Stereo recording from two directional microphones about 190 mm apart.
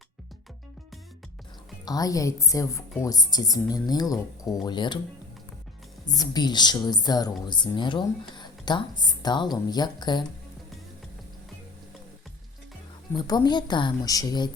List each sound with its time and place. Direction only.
1.8 s a woman's voice: 20° left (ahead or behind)
6.1 s a woman's voice: 20° left (ahead or behind)
13.1 s a woman's voice: 20° left (ahead or behind)